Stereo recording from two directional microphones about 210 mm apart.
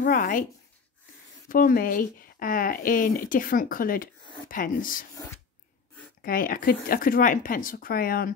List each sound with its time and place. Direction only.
0.0 s speech: 40° left (ahead or behind)
1.5 s speech: 40° left (ahead or behind)
6.2 s speech: 40° left (ahead or behind)